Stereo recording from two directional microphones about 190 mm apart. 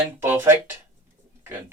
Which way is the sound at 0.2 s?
10° right (ahead or behind).